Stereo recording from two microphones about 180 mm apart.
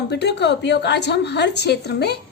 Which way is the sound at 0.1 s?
70° left (ahead or behind).